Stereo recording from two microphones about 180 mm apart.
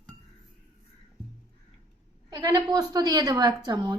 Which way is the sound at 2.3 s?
25° right (ahead or behind).